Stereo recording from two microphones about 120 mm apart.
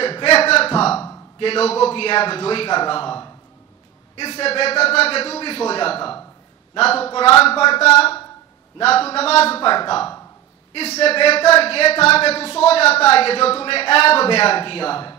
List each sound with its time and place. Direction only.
0.0 s a sound: 50° left (ahead or behind)
1.4 s a man's voice: 55° left (ahead or behind)
4.2 s a man's voice: 55° left (ahead or behind)
10.7 s speech: 60° left (ahead or behind)